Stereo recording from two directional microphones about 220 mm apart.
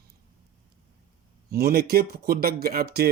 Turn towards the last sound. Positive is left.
turn(degrees=-45)  # may be behind; listen again after turning